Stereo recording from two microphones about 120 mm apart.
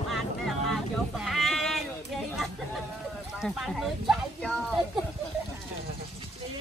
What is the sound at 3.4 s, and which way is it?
Speech, centre (ahead or behind).